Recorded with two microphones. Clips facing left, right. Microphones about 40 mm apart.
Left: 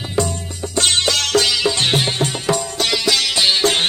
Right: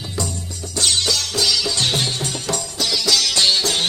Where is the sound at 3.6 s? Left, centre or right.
Left.